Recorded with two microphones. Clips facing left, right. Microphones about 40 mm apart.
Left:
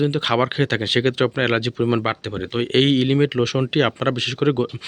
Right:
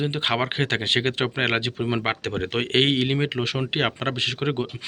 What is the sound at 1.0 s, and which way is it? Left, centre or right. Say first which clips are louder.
Speech: left 5 dB; right.